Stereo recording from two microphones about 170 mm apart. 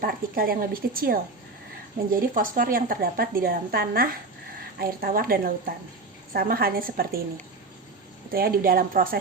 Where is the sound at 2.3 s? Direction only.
55° right (ahead or behind).